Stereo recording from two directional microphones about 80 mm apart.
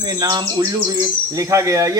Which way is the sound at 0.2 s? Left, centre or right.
Right.